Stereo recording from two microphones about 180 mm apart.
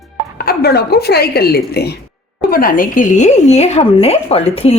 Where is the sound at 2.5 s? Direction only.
50° left (ahead or behind).